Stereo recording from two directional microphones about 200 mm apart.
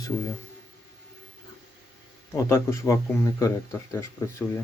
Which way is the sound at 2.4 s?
15° left (ahead or behind).